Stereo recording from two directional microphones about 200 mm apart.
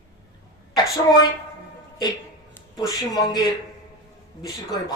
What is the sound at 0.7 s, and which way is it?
Speech, 20° left (ahead or behind).